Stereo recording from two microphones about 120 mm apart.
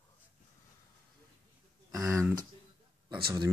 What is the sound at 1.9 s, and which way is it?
Speech, 25° right (ahead or behind).